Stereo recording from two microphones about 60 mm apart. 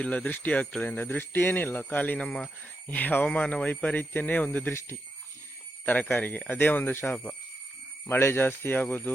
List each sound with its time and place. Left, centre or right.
0.0 s speech: left
2.1 s speech: centre
2.9 s speech: left
5.8 s speech: left
8.2 s speech: left